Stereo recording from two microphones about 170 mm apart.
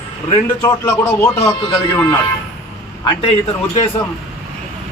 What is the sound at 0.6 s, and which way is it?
Speech, 15° left (ahead or behind).